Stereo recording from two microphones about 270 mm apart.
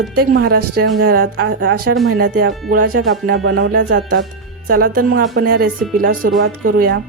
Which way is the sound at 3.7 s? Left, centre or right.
Right.